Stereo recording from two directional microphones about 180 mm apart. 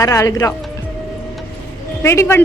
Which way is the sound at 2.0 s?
15° left (ahead or behind).